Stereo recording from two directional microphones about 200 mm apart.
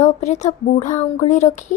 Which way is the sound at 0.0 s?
35° left (ahead or behind).